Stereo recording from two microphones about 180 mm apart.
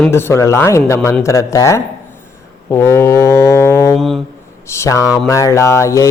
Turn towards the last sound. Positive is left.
turn(degrees=15)  # may be behind; listen again after turning